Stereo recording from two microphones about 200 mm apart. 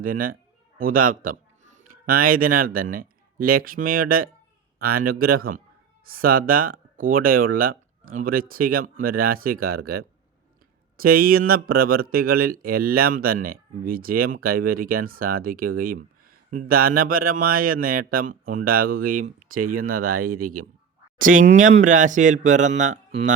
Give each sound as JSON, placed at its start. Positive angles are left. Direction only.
{"t": 0.0, "sound": "speech", "side_deg": -45}